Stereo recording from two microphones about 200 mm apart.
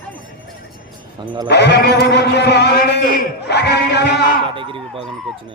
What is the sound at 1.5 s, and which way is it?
A man's voice, 55° left (ahead or behind).